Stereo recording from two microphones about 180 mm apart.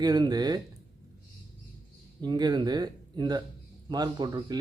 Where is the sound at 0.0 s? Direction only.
20° right (ahead or behind).